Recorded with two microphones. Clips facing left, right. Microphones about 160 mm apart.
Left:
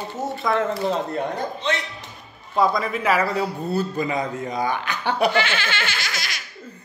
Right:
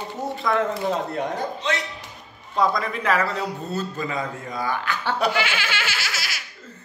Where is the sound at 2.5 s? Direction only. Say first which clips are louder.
Left 2 dB; 5° left (ahead or behind).